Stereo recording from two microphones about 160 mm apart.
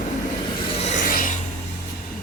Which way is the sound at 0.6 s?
40° left (ahead or behind).